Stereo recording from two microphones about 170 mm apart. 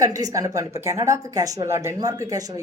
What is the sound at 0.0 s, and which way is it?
Speech, 20° right (ahead or behind).